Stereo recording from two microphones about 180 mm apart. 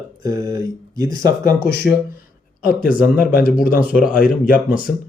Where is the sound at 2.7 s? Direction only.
50° left (ahead or behind).